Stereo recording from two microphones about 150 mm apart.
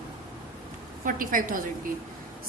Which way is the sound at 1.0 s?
65° right (ahead or behind).